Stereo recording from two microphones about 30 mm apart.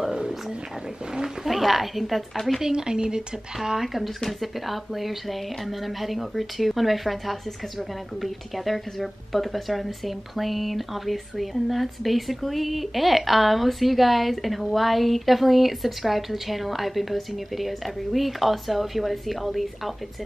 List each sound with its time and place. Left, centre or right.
1.4 s speech: centre
2.6 s a woman's voice: right
3.7 s speech: centre